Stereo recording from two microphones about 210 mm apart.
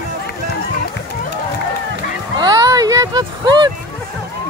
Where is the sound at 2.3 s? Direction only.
20° right (ahead or behind).